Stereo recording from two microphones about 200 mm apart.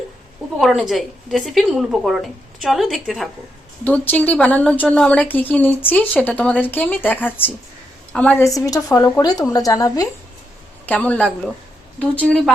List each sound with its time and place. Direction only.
0.6 s a woman's voice: centre (ahead or behind); by 10.1 s 20° left (ahead or behind)
10.8 s a woman's voice: 5° left (ahead or behind)